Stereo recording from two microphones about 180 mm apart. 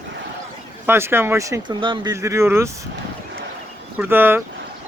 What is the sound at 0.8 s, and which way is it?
Speech, 15° right (ahead or behind).